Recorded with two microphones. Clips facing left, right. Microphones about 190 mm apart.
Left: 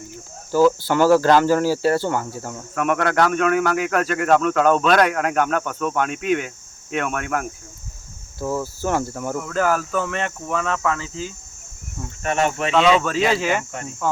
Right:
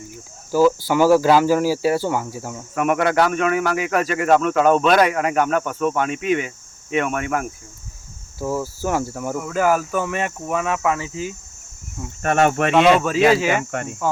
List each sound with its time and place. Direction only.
0.5 s speech: 10° right (ahead or behind)
12.2 s speech: 50° right (ahead or behind)
13.0 s speech: 10° right (ahead or behind)